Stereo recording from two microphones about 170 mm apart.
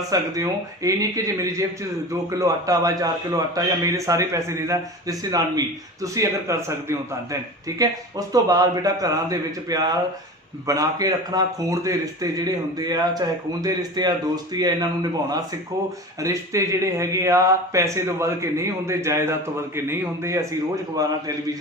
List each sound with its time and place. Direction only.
0.1 s a man's voice: 20° right (ahead or behind)
16.2 s speech: 20° right (ahead or behind)